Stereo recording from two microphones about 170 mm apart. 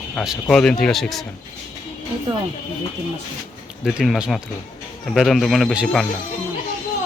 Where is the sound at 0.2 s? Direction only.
Centre (ahead or behind).